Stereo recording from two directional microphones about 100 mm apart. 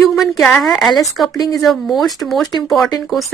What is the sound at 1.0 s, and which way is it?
Speech, 40° left (ahead or behind).